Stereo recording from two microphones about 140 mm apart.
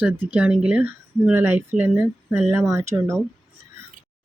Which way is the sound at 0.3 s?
5° right (ahead or behind).